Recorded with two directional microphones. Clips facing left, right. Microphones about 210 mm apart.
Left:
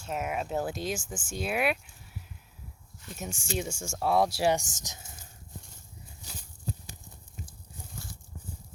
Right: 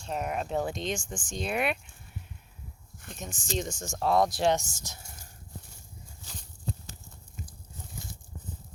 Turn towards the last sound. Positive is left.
turn(degrees=10)  # may be behind; listen again after turning